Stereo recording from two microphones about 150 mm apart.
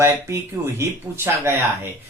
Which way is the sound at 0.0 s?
20° right (ahead or behind).